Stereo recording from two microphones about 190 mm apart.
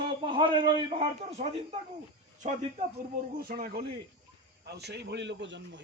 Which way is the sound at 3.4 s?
50° right (ahead or behind).